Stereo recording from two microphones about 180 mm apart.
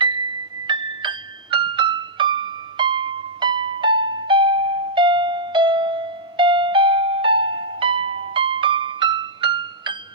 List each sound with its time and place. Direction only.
0.7 s music: 25° right (ahead or behind)